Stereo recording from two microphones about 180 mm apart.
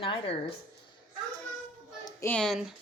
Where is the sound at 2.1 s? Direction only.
15° left (ahead or behind).